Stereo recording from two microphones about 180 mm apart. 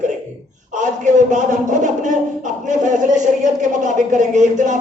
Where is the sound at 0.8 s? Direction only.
45° right (ahead or behind).